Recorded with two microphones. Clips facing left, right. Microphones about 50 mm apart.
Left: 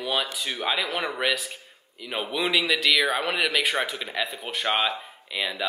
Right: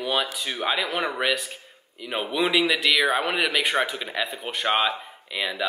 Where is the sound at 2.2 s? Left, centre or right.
Centre.